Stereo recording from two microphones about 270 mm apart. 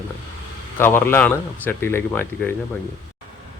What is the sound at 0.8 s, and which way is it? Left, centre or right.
A man's voice, centre.